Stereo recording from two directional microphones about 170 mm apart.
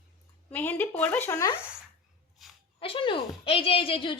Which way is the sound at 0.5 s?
10° left (ahead or behind).